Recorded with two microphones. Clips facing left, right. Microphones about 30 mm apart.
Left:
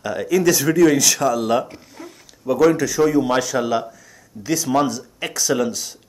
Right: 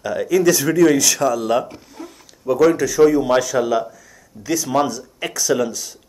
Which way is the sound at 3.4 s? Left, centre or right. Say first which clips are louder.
Right 2 dB; centre.